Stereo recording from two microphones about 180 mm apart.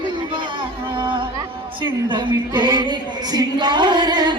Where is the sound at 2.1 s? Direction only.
25° right (ahead or behind).